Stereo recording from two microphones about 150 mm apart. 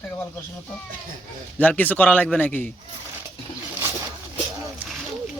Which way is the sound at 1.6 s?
10° left (ahead or behind).